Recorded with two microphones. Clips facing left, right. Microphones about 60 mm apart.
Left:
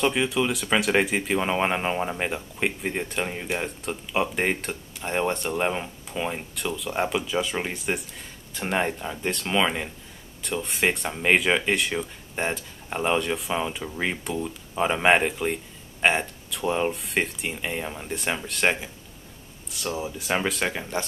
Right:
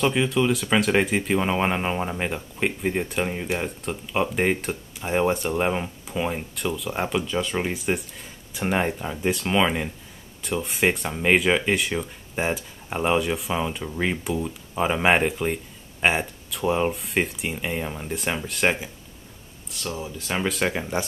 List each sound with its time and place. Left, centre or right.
0.0 s speech: centre
19.9 s speech: centre
20.4 s speech: centre